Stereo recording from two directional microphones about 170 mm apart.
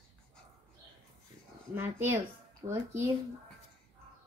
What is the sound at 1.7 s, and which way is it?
Speech, 15° right (ahead or behind).